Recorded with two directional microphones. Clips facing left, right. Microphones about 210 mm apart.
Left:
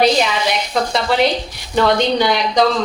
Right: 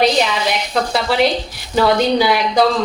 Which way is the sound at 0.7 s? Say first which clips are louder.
Even; centre (ahead or behind).